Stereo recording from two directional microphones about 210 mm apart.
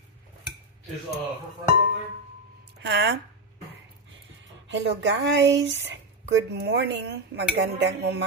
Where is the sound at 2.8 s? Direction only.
55° right (ahead or behind).